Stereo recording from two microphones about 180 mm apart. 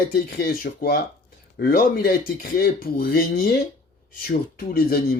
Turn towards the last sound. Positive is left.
turn(degrees=60)  # may be behind; listen again after turning